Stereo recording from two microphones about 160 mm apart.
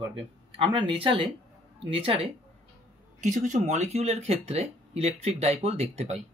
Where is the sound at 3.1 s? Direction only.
50° right (ahead or behind).